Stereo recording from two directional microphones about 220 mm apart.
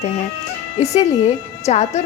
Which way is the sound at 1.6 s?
30° left (ahead or behind).